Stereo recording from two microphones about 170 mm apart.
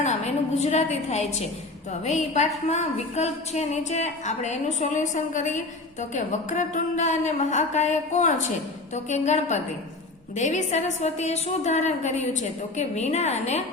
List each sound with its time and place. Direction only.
0.0 s a woman's voice: 40° left (ahead or behind)